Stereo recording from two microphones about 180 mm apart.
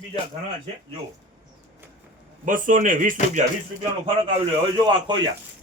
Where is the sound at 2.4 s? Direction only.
50° right (ahead or behind).